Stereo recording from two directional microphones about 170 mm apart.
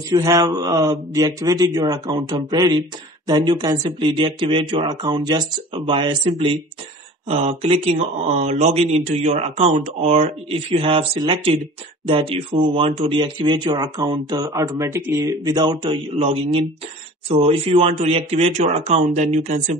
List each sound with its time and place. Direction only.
0.1 s speech: 20° right (ahead or behind); by 19.8 s 45° right (ahead or behind)